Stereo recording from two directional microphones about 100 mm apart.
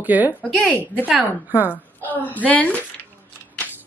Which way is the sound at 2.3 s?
15° left (ahead or behind).